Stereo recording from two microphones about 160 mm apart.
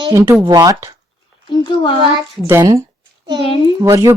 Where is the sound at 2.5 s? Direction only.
15° right (ahead or behind).